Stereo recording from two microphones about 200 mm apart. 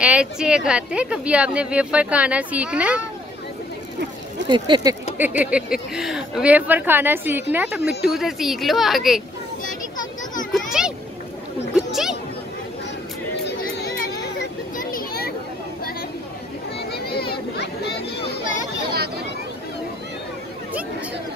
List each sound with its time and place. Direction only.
0.0 s speech: 5° right (ahead or behind)
4.5 s speech: 20° right (ahead or behind)
5.1 s speech: 10° right (ahead or behind)
10.5 s a sound: 5° right (ahead or behind)
13.4 s chatter: 55° left (ahead or behind)
14.8 s children playing: 45° left (ahead or behind)
16.9 s a sound: 50° left (ahead or behind)